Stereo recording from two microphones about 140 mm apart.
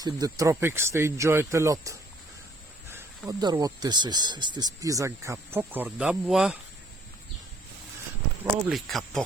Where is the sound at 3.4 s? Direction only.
30° right (ahead or behind); by 6.5 s 5° right (ahead or behind).